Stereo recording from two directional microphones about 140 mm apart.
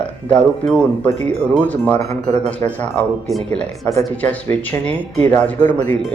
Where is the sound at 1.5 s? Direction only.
10° left (ahead or behind).